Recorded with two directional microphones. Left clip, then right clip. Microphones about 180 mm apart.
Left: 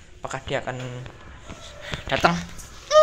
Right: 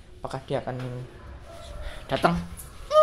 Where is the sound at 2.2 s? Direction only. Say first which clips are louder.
Left 3 dB; 10° right (ahead or behind).